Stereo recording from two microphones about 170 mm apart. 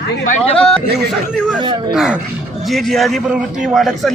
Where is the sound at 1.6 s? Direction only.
25° right (ahead or behind).